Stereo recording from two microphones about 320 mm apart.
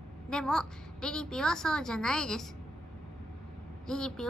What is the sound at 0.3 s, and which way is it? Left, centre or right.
A woman's voice, centre.